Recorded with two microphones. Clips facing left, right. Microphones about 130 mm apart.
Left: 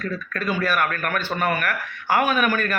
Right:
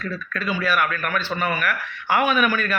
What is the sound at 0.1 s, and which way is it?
A man's voice, 45° left (ahead or behind).